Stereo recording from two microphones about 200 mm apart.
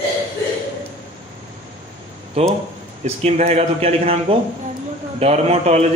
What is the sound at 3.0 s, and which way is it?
A man's voice, 35° right (ahead or behind).